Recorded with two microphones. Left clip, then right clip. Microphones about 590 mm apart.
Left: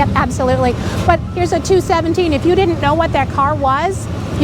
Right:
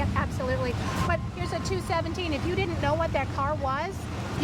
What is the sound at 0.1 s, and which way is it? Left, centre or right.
Speech, left.